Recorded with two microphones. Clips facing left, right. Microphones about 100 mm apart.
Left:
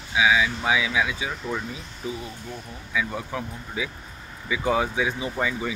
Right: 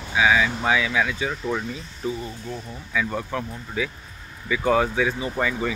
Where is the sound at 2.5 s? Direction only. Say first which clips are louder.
Right 1 dB; 10° left (ahead or behind).